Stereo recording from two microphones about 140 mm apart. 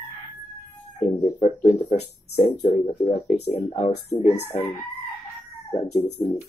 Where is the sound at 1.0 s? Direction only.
55° left (ahead or behind).